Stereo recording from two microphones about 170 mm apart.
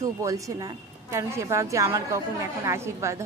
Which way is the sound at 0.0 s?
20° right (ahead or behind).